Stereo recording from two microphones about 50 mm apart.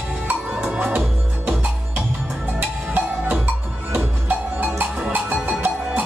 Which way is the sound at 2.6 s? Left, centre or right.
Right.